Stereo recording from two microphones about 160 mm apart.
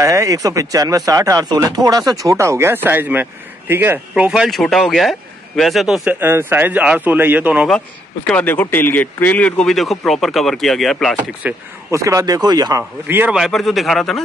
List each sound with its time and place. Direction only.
0.0 s speech: 20° right (ahead or behind); by 6.1 s centre (ahead or behind)
6.1 s a man's voice: 15° right (ahead or behind)
8.3 s speech: 10° left (ahead or behind)
11.4 s speech: 20° right (ahead or behind)
13.0 s a man's voice: 10° right (ahead or behind)
13.4 s speech: centre (ahead or behind)